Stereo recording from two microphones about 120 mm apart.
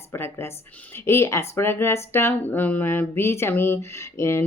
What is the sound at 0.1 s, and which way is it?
Speech, 20° left (ahead or behind).